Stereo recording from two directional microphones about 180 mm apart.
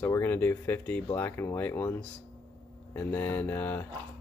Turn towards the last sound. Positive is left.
turn(degrees=10)  # may be behind; listen again after turning